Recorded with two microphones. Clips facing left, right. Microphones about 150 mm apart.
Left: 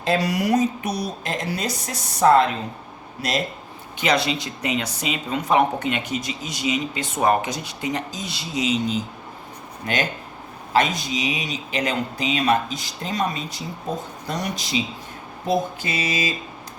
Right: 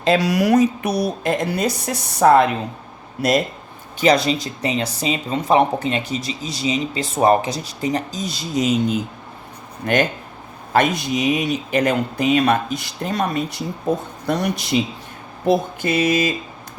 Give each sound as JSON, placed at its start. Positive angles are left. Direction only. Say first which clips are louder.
{"t": 0.0, "sound": "speech", "louder": "right 5 dB", "side_deg": -90}
{"t": 4.0, "sound": "speech", "louder": "right 5 dB", "side_deg": -40}